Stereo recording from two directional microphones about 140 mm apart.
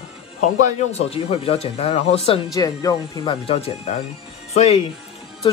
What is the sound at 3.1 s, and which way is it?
Speech, 40° left (ahead or behind).